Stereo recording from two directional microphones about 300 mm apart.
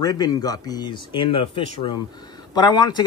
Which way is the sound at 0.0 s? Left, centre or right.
Centre.